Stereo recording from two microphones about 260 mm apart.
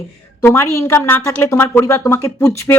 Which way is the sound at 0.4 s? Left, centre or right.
Centre.